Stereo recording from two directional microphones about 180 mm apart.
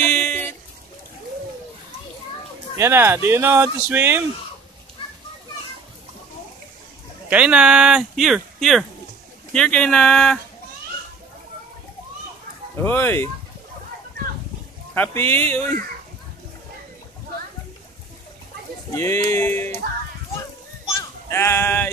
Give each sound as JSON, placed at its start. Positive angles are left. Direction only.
{"t": 0.0, "sound": "a sound", "side_deg": 5}
{"t": 2.8, "sound": "speech", "side_deg": -15}
{"t": 7.2, "sound": "speech", "side_deg": -5}
{"t": 12.7, "sound": "music", "side_deg": 10}
{"t": 15.0, "sound": "music", "side_deg": 10}
{"t": 18.9, "sound": "music", "side_deg": 15}
{"t": 21.3, "sound": "music", "side_deg": 15}